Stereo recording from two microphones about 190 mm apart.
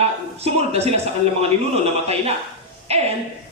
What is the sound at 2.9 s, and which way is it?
Speech, 35° right (ahead or behind).